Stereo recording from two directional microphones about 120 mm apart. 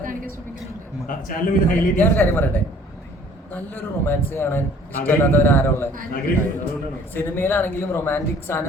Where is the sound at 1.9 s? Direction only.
15° left (ahead or behind).